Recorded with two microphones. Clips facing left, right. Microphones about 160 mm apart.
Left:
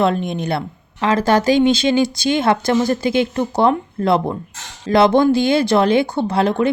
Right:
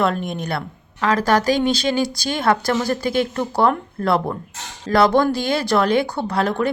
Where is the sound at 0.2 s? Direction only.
Centre (ahead or behind).